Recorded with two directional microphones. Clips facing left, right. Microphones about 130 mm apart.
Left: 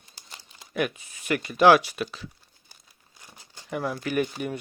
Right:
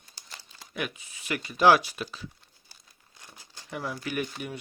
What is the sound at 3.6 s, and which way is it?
Speech, 50° left (ahead or behind).